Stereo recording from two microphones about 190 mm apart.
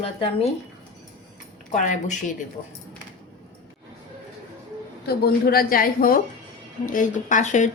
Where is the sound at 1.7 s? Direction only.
40° left (ahead or behind).